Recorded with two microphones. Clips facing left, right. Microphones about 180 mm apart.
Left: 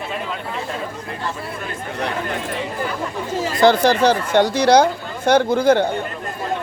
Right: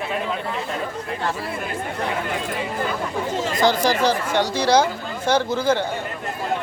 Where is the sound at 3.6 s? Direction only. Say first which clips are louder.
Left 5 dB; 60° left (ahead or behind).